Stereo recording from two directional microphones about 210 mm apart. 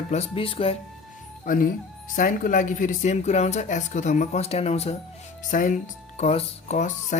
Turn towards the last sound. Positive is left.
turn(degrees=35)  # may be behind; listen again after turning